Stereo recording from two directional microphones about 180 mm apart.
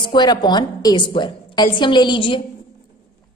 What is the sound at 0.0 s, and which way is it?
A woman's voice, 25° left (ahead or behind).